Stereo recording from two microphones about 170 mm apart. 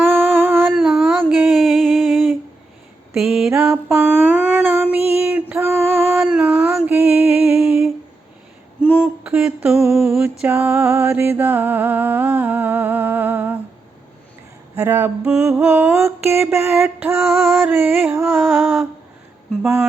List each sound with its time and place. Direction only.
0.1 s humming: 10° right (ahead or behind)
0.7 s a sound: 5° right (ahead or behind)
3.1 s mantra: centre (ahead or behind)
4.9 s child singing: 35° left (ahead or behind)
5.3 s female singing: 10° right (ahead or behind)
9.2 s a sound: 5° right (ahead or behind)
10.2 s music: 10° right (ahead or behind)
14.8 s mantra: 10° right (ahead or behind)